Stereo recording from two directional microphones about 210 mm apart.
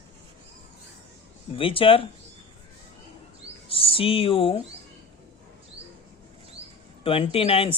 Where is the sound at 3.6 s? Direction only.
25° left (ahead or behind).